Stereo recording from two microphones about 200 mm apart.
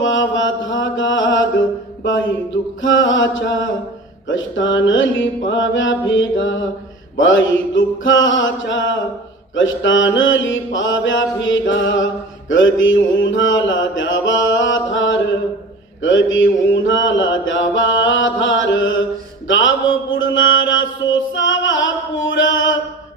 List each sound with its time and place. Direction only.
0.0 s mantra: 70° left (ahead or behind)
2.8 s mantra: 70° left (ahead or behind)
20.1 s chant: 70° left (ahead or behind)